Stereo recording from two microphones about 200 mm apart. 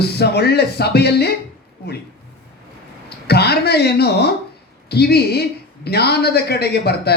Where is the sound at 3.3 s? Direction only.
55° left (ahead or behind).